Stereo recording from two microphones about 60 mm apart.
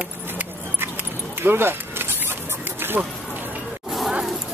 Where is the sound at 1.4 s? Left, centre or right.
Right.